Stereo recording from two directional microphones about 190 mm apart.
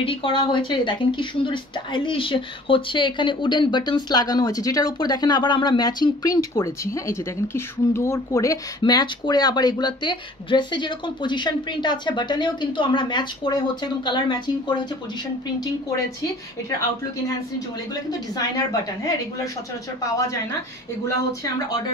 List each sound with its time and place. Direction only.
0.0 s speech: 30° left (ahead or behind)